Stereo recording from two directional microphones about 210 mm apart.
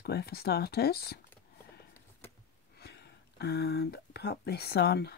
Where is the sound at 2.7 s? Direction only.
50° left (ahead or behind).